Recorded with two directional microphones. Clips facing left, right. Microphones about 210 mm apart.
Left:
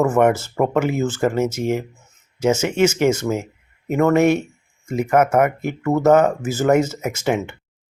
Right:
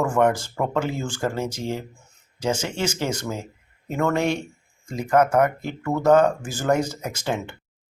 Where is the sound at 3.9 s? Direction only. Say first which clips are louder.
Left 7 dB; 20° left (ahead or behind).